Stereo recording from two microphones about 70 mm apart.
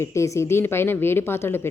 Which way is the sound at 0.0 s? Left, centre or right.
Left.